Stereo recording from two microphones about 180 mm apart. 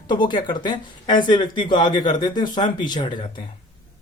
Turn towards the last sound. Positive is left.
turn(degrees=25)  # may be behind; listen again after turning